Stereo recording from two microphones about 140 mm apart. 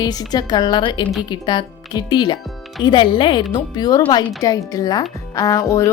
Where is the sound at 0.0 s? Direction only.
30° left (ahead or behind).